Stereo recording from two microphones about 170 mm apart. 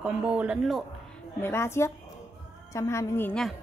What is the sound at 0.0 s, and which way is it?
Speech, 10° right (ahead or behind).